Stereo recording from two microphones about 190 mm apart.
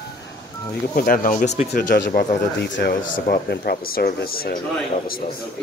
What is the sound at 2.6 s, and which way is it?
Speech, 70° left (ahead or behind).